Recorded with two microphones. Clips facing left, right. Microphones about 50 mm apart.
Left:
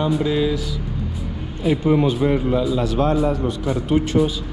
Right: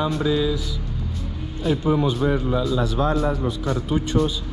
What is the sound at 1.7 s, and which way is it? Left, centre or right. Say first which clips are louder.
Speech: left 3 dB; left.